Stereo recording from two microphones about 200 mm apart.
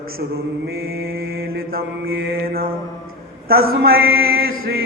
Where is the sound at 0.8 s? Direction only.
50° right (ahead or behind).